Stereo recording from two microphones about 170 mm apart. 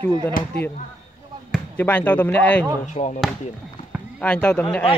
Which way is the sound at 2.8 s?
45° left (ahead or behind).